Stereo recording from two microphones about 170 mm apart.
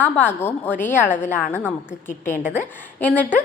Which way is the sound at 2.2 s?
50° left (ahead or behind).